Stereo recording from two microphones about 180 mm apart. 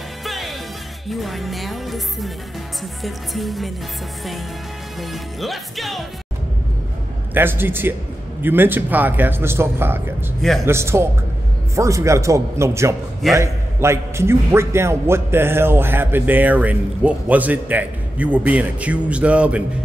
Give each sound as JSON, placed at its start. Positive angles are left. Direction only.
{"t": 0.2, "sound": "music", "side_deg": 0}
{"t": 5.1, "sound": "music", "side_deg": 0}
{"t": 7.3, "sound": "a man's voice", "side_deg": -10}